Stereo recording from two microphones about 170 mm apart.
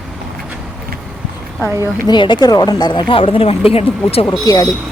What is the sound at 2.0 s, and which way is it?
Speech, 25° left (ahead or behind).